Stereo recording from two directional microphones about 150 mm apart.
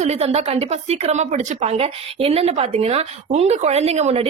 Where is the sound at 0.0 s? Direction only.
45° right (ahead or behind).